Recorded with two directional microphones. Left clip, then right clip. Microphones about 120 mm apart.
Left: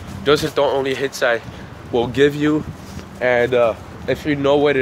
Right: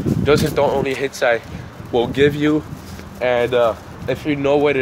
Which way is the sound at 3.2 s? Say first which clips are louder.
Left 1 dB; 30° left (ahead or behind).